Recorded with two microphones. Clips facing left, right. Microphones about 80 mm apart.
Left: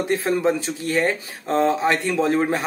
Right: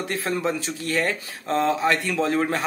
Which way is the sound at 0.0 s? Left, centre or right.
Left.